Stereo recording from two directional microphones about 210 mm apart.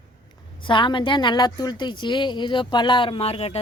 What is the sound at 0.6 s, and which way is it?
A woman's voice, 20° left (ahead or behind).